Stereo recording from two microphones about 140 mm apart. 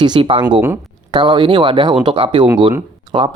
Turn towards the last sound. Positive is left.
turn(degrees=-35)  # may be behind; listen again after turning